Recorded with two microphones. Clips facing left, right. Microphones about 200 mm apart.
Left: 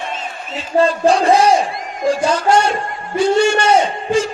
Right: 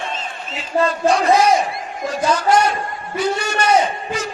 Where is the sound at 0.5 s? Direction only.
30° left (ahead or behind).